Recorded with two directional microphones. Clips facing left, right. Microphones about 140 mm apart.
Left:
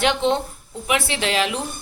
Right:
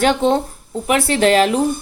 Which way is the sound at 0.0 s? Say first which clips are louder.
Right 5 dB; 45° right (ahead or behind).